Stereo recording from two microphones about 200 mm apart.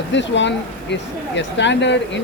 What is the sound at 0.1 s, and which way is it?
Speech, 65° left (ahead or behind).